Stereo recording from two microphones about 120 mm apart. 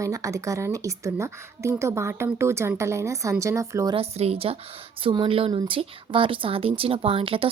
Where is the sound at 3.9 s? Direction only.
55° right (ahead or behind).